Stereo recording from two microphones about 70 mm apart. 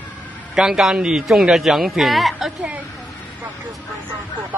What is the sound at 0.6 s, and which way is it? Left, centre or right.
Speech, centre.